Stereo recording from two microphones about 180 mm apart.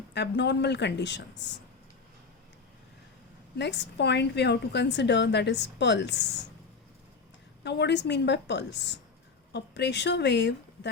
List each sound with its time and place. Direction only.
0.1 s a woman's voice: 75° left (ahead or behind)
3.6 s a woman's voice: 75° left (ahead or behind)
7.6 s a woman's voice: 70° left (ahead or behind)